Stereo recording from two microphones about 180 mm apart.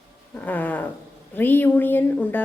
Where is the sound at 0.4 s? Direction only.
10° left (ahead or behind).